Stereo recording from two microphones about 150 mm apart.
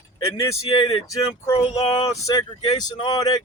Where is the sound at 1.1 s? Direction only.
20° left (ahead or behind).